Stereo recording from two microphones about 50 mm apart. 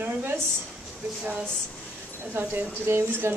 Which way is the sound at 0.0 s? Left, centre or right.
Right.